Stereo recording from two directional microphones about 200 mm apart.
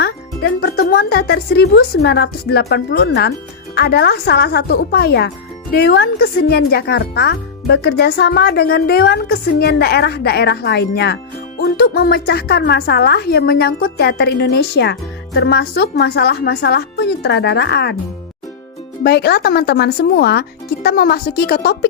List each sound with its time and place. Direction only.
0.0 s speech: 55° left (ahead or behind)
19.0 s speech: 55° left (ahead or behind)